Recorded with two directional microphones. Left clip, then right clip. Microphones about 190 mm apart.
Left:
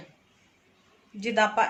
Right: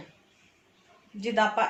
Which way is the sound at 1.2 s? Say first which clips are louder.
Left 1 dB; 30° left (ahead or behind).